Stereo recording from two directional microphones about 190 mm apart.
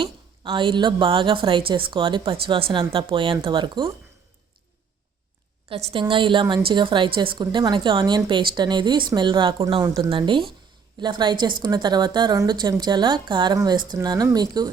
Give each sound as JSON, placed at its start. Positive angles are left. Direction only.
{"t": 0.0, "sound": "speech", "side_deg": -25}
{"t": 5.6, "sound": "speech", "side_deg": -30}